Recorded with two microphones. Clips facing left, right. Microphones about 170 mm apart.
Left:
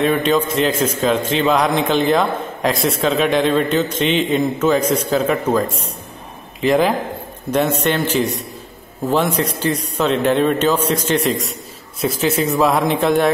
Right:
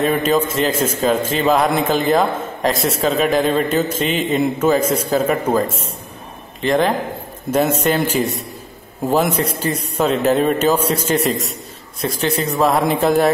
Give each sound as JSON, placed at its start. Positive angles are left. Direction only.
{"t": 0.0, "sound": "a man's voice", "side_deg": -5}
{"t": 1.1, "sound": "a man's voice", "side_deg": -45}
{"t": 1.4, "sound": "a man's voice", "side_deg": -5}
{"t": 7.5, "sound": "a man's voice", "side_deg": -10}